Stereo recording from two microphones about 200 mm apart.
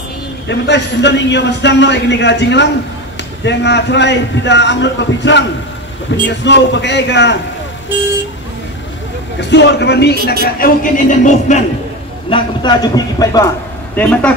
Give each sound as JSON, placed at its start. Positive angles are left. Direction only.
{"t": 0.5, "sound": "a man's voice", "side_deg": 60}
{"t": 9.4, "sound": "a man's voice", "side_deg": 60}
{"t": 10.4, "sound": "speech", "side_deg": 45}
{"t": 12.3, "sound": "a man's voice", "side_deg": 25}
{"t": 13.9, "sound": "speech", "side_deg": 5}